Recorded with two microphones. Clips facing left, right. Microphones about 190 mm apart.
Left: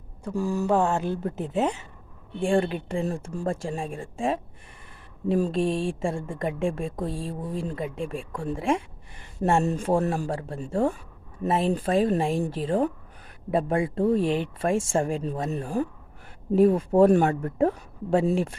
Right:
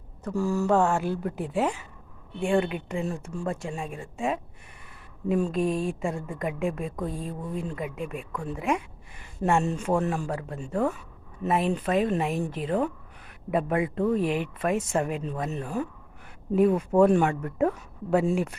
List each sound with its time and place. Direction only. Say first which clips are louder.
0.3 s a woman's voice: even; 15° left (ahead or behind)